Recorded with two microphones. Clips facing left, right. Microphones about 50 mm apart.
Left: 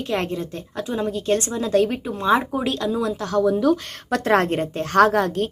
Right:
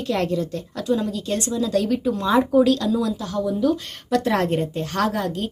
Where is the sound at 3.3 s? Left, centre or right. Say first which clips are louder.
Left 6 dB; left.